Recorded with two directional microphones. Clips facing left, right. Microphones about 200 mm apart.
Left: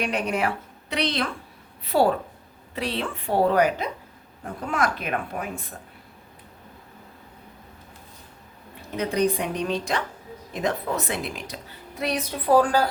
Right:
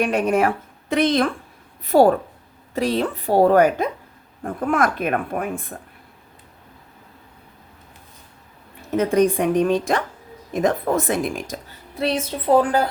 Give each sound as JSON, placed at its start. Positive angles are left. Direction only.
{"t": 0.0, "sound": "speech", "side_deg": -50}
{"t": 8.9, "sound": "speech", "side_deg": -50}
{"t": 11.9, "sound": "a woman's voice", "side_deg": -30}